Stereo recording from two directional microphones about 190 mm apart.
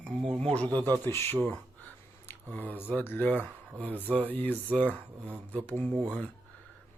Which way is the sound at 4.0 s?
10° right (ahead or behind).